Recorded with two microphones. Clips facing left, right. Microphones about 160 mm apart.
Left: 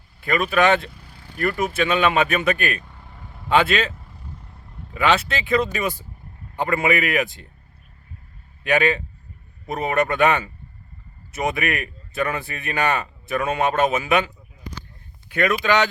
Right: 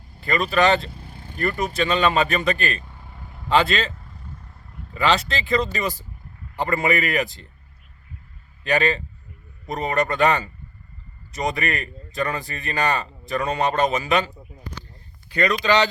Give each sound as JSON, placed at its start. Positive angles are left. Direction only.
{"t": 0.3, "sound": "a man's voice", "side_deg": 5}
{"t": 0.9, "sound": "vehicle", "side_deg": -25}
{"t": 1.4, "sound": "a man's voice", "side_deg": 5}
{"t": 2.8, "sound": "vehicle", "side_deg": -5}
{"t": 4.9, "sound": "a man's voice", "side_deg": 5}
{"t": 8.6, "sound": "a man's voice", "side_deg": 5}
{"t": 15.3, "sound": "a man's voice", "side_deg": 5}